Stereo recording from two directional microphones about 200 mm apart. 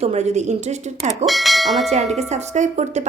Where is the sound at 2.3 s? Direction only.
35° right (ahead or behind).